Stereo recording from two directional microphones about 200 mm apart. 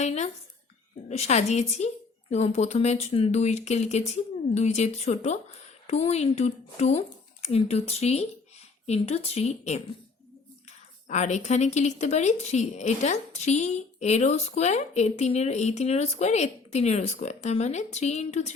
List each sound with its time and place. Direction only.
0.0 s speech: 35° left (ahead or behind)